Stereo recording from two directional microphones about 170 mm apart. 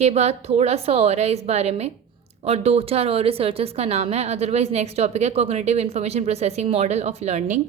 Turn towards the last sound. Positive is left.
turn(degrees=-40)  # may be behind; listen again after turning